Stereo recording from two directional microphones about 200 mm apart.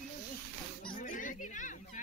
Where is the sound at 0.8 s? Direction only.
45° left (ahead or behind).